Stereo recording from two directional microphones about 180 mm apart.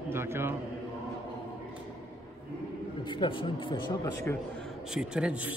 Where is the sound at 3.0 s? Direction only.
25° left (ahead or behind).